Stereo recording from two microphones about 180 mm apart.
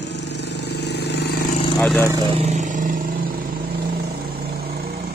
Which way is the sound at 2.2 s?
40° right (ahead or behind).